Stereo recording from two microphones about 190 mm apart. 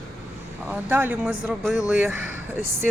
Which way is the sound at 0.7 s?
10° right (ahead or behind).